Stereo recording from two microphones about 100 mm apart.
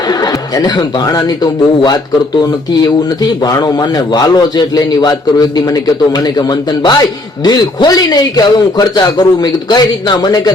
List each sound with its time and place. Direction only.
0.1 s a man's voice: 40° left (ahead or behind)